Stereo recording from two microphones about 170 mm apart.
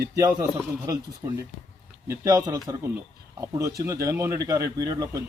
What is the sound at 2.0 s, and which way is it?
Speech, 15° right (ahead or behind).